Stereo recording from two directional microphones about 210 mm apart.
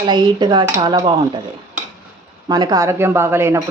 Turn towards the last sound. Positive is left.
turn(degrees=-10)  # may be behind; listen again after turning